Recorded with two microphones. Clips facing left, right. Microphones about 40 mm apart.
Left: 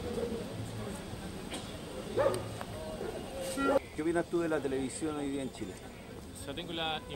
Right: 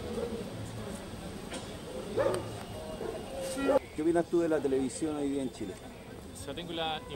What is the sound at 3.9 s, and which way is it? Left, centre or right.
Speech, centre.